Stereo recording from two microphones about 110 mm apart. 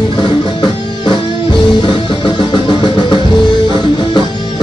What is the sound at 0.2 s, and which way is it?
Music, 45° left (ahead or behind).